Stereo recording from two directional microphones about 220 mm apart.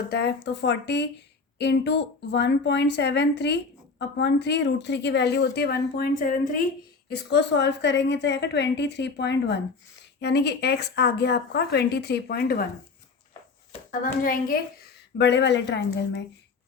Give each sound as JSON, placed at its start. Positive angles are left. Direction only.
{"t": 0.1, "sound": "speech", "side_deg": 50}
{"t": 7.1, "sound": "speech", "side_deg": 50}
{"t": 13.9, "sound": "speech", "side_deg": 40}